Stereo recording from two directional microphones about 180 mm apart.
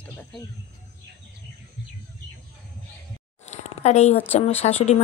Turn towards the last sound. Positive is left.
turn(degrees=35)  # may be behind; listen again after turning